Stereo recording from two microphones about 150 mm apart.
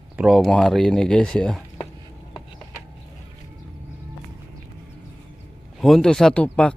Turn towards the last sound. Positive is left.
turn(degrees=10)  # may be behind; listen again after turning